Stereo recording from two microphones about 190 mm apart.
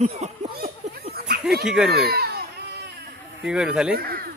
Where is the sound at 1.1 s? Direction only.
55° right (ahead or behind).